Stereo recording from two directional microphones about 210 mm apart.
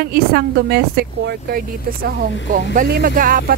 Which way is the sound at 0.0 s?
45° right (ahead or behind).